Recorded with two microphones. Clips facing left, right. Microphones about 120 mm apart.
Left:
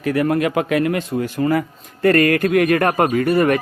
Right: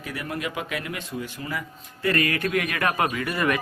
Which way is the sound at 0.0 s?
60° left (ahead or behind).